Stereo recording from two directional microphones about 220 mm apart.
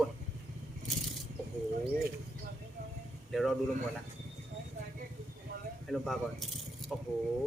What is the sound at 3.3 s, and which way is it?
Speech, centre (ahead or behind).